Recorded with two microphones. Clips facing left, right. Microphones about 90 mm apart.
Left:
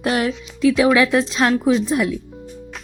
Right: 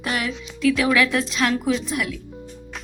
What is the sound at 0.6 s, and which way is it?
Speech, 25° left (ahead or behind).